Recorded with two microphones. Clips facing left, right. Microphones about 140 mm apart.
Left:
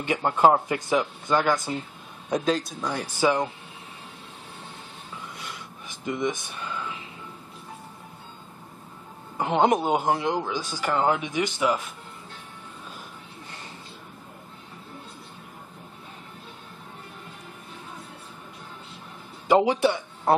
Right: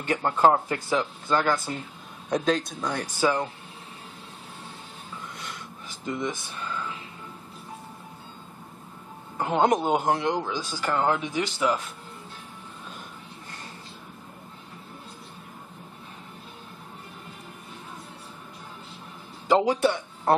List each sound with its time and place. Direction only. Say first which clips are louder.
0.0 s speech: left 1 dB; 10° left (ahead or behind)
6.2 s speech: left 3 dB; 10° left (ahead or behind)
9.4 s speech: left 1 dB; 5° left (ahead or behind)
19.5 s speech: left 1 dB; 10° left (ahead or behind)